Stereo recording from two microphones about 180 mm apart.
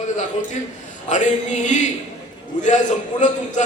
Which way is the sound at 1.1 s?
45° left (ahead or behind).